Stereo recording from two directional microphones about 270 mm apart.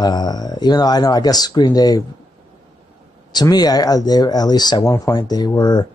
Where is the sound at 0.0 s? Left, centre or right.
Centre.